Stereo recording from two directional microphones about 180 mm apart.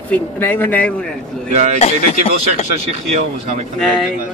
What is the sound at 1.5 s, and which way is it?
Speech, 40° right (ahead or behind).